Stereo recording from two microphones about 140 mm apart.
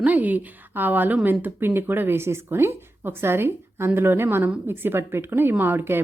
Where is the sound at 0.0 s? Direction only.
10° right (ahead or behind).